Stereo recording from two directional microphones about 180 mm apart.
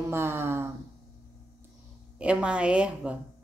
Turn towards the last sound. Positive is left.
turn(degrees=-5)  # may be behind; listen again after turning